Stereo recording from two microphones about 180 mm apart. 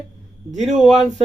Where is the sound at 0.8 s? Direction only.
Centre (ahead or behind).